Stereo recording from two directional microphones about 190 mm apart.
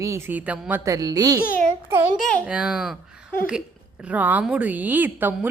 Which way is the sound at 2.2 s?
5° right (ahead or behind).